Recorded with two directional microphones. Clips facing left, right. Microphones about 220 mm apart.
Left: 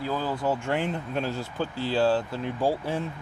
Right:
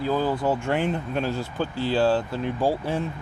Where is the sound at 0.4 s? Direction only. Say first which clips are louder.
Right 3 dB; 60° right (ahead or behind).